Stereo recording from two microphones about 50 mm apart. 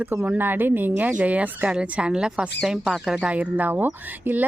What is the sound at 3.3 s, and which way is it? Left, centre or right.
A woman's voice, right.